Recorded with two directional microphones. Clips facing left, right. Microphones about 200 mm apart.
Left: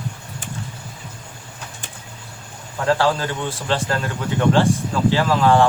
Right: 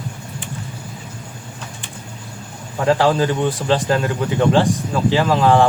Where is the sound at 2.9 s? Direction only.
15° right (ahead or behind).